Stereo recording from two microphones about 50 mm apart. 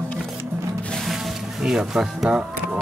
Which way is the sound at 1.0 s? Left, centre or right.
Centre.